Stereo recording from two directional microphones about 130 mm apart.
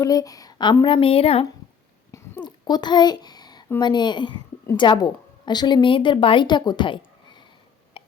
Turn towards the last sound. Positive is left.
turn(degrees=40)  # may be behind; listen again after turning